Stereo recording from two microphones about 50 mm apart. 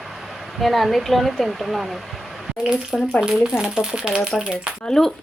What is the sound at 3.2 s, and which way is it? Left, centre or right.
Speech, centre.